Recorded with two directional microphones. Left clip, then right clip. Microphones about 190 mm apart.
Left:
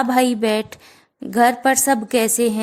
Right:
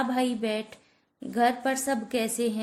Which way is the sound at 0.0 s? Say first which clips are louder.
Left 10 dB; 45° left (ahead or behind).